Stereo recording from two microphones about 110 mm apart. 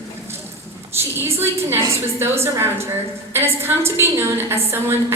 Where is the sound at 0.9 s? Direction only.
20° right (ahead or behind).